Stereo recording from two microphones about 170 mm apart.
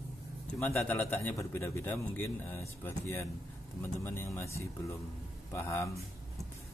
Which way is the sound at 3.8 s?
15° left (ahead or behind).